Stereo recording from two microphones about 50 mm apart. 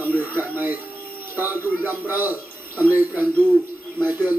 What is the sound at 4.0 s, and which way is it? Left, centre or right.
Speech, right.